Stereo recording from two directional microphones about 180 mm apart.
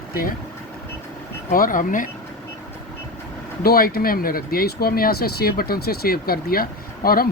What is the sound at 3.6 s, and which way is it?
Speech, 55° left (ahead or behind).